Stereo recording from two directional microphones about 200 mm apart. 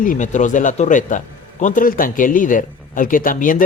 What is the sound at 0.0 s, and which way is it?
A man's voice, 40° left (ahead or behind).